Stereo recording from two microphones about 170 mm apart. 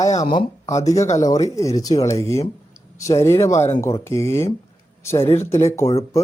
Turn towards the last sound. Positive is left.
turn(degrees=15)  # may be behind; listen again after turning